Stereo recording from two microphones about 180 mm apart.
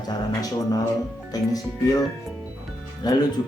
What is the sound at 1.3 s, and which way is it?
Speech, 20° left (ahead or behind).